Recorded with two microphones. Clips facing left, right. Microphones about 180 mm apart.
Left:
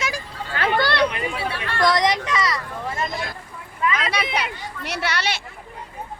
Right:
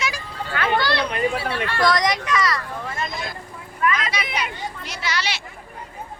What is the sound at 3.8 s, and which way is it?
Speech, 20° left (ahead or behind).